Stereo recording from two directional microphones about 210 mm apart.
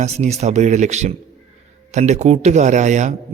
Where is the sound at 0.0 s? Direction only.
30° right (ahead or behind).